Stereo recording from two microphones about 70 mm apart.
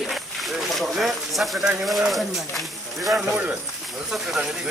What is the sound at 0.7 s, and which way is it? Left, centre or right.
Speech, centre.